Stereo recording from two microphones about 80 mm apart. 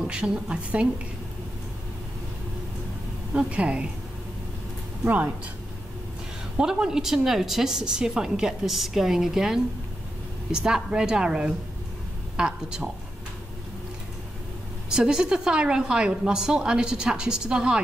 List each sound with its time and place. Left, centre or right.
0.0 s a woman's voice: centre
3.3 s a woman's voice: centre
5.0 s speech: centre
6.6 s a woman's voice: centre
14.9 s a woman's voice: centre